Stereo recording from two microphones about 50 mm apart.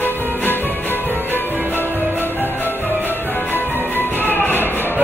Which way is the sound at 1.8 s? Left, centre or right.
Right.